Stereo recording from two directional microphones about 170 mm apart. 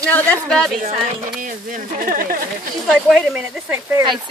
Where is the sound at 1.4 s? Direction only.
50° right (ahead or behind).